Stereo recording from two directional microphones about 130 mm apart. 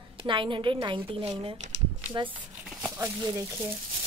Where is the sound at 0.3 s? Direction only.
40° right (ahead or behind).